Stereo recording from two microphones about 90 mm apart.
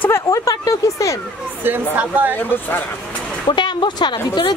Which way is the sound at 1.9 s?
20° right (ahead or behind).